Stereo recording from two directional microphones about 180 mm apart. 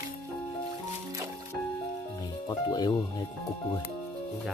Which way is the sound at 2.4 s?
20° left (ahead or behind).